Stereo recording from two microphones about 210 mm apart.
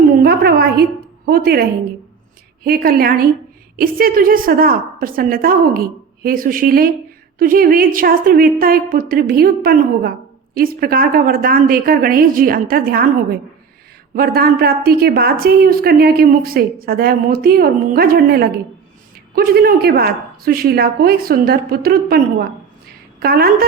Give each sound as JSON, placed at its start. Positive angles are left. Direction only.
{"t": 0.2, "sound": "a sound", "side_deg": -50}
{"t": 2.6, "sound": "speech", "side_deg": -45}
{"t": 23.2, "sound": "speech", "side_deg": -45}